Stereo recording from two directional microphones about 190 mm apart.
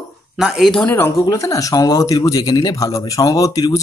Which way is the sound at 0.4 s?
Centre (ahead or behind).